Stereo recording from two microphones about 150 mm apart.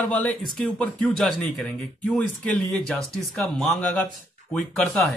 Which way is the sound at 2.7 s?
5° left (ahead or behind).